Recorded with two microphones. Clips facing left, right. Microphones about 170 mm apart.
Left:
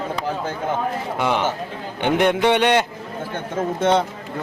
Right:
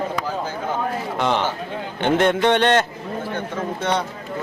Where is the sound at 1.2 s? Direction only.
10° left (ahead or behind).